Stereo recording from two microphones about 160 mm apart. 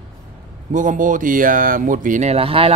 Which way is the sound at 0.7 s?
55° right (ahead or behind).